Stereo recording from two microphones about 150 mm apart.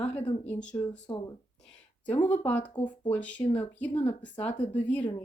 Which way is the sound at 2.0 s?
10° left (ahead or behind).